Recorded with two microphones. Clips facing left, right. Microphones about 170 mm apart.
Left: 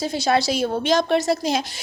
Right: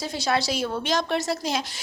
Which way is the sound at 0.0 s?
20° left (ahead or behind).